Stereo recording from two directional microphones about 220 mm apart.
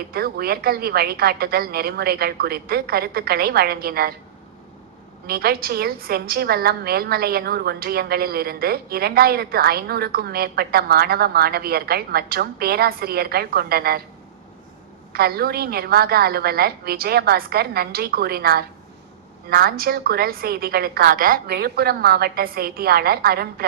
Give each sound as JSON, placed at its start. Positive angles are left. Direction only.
{"t": 0.1, "sound": "a woman's voice", "side_deg": -45}
{"t": 5.2, "sound": "a woman's voice", "side_deg": -45}
{"t": 15.1, "sound": "a woman's voice", "side_deg": -45}